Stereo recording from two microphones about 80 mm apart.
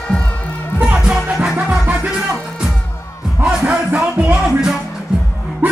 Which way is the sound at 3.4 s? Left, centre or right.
Centre.